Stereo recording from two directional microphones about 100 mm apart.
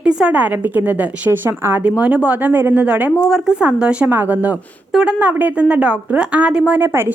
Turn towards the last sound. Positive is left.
turn(degrees=-20)  # may be behind; listen again after turning